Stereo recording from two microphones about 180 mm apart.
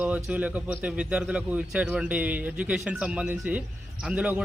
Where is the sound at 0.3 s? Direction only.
10° right (ahead or behind).